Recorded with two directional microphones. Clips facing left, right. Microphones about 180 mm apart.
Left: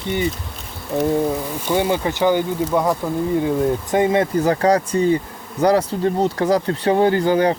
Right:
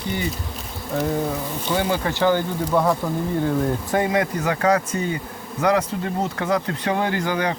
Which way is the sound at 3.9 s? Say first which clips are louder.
Left 4 dB; 25° left (ahead or behind).